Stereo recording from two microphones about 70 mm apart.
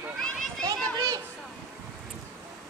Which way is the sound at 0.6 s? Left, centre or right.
Right.